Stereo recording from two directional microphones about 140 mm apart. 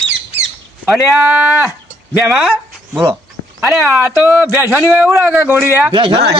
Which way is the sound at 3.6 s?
15° right (ahead or behind).